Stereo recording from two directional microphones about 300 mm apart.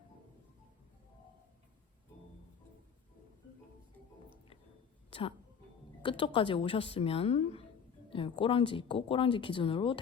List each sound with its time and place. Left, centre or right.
5.1 s a woman's voice: centre